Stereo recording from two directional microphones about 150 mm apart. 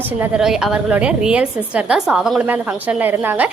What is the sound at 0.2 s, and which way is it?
A woman's voice, 5° right (ahead or behind).